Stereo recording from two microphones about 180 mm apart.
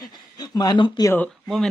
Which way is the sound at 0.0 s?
20° left (ahead or behind).